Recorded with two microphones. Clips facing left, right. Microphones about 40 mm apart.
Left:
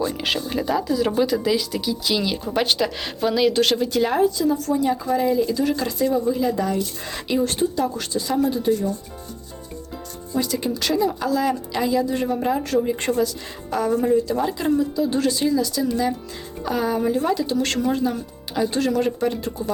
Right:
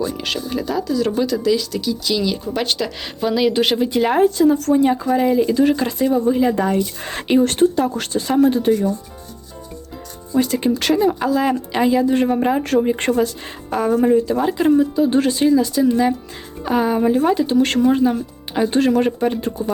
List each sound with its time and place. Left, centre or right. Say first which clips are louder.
0.0 s speech: right 1 dB; centre
3.5 s speech: right 2 dB; centre
4.2 s speech: right 5 dB; right
10.4 s speech: right 6 dB; right